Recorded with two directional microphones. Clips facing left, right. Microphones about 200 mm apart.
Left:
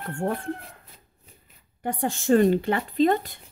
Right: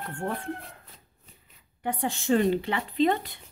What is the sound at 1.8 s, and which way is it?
Speech, 45° left (ahead or behind).